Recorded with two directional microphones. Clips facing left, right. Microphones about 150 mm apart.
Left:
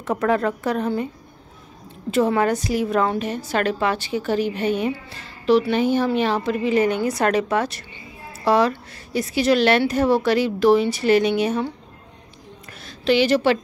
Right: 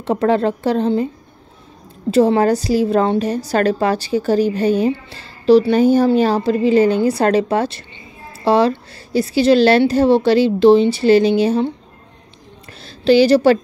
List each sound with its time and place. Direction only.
0.0 s a woman's voice: 30° right (ahead or behind)
2.0 s a woman's voice: 35° right (ahead or behind)
12.8 s a woman's voice: 35° right (ahead or behind)